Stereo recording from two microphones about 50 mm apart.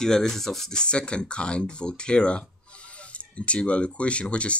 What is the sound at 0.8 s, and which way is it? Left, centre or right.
Speech, centre.